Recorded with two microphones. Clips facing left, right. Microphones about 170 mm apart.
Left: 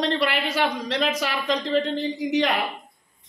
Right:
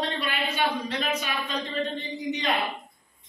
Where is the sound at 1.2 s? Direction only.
90° left.